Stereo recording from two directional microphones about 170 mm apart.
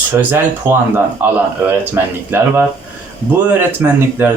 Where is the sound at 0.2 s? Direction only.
10° right (ahead or behind).